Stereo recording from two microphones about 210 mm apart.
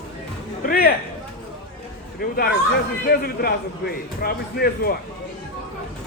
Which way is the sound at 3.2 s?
50° left (ahead or behind).